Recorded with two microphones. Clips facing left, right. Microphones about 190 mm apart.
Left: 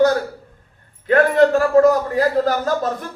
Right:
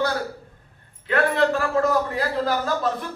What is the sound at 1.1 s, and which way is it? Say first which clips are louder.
A man's voice: left 7 dB; 45° left (ahead or behind).